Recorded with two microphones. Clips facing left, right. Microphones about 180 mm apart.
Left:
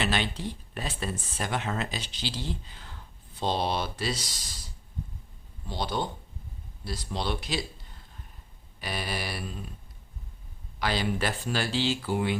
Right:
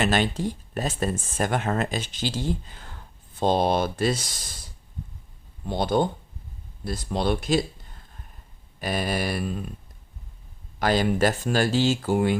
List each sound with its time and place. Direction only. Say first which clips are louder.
0.0 s speech: right 6 dB; 45° right (ahead or behind)
5.6 s speech: right 8 dB; 50° right (ahead or behind)
8.8 s speech: right 7 dB; 50° right (ahead or behind)
10.8 s speech: right 7 dB; 45° right (ahead or behind)